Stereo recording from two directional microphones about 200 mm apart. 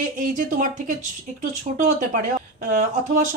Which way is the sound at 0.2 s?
40° right (ahead or behind).